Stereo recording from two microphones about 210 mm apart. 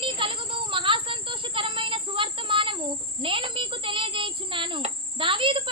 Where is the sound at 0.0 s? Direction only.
25° right (ahead or behind).